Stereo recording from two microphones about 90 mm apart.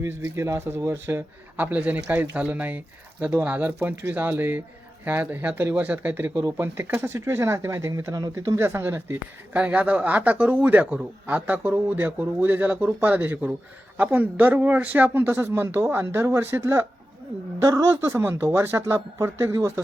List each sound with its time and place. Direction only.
0.0 s a woman's voice: 30° right (ahead or behind)
18.1 s speech: 25° right (ahead or behind)